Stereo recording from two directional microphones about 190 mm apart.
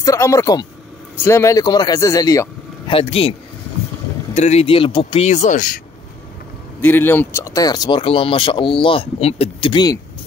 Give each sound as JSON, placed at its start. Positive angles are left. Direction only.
{"t": 0.0, "sound": "a man's voice", "side_deg": 15}
{"t": 2.9, "sound": "speech", "side_deg": 30}
{"t": 6.8, "sound": "speech", "side_deg": 10}